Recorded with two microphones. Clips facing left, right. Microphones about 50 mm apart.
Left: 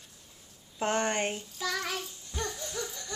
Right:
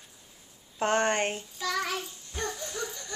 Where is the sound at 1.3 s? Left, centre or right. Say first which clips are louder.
Right 3 dB; centre.